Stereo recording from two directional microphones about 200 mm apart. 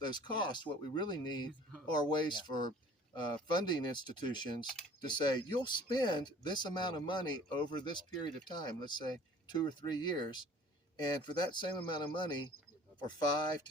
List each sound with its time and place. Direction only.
0.0 s speech: 20° left (ahead or behind)